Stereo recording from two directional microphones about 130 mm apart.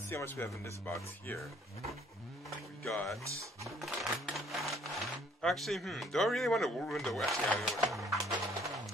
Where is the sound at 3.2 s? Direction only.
25° right (ahead or behind).